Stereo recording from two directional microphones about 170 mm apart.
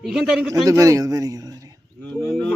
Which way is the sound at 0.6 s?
20° right (ahead or behind).